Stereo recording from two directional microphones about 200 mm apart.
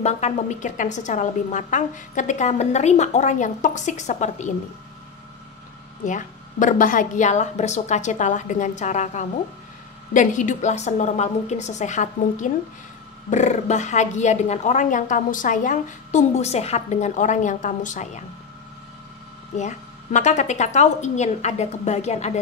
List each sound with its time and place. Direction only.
0.0 s speech: 35° left (ahead or behind)
6.0 s speech: 40° left (ahead or behind)
19.5 s speech: 35° left (ahead or behind)